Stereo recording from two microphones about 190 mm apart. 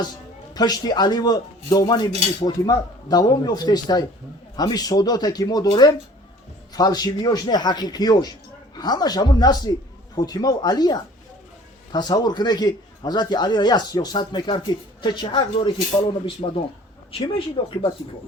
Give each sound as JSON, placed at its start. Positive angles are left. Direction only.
{"t": 0.5, "sound": "a man's voice", "side_deg": 20}